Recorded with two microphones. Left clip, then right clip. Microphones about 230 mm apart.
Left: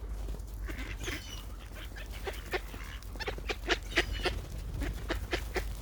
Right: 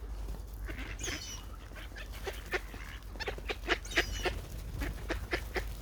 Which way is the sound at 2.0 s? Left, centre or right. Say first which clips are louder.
Left 1 dB; centre.